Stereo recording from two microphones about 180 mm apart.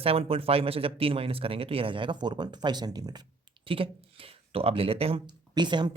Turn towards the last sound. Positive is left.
turn(degrees=-25)  # may be behind; listen again after turning